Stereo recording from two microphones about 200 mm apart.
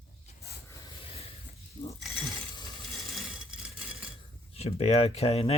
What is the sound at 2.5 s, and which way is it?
Ratchet, 20° left (ahead or behind).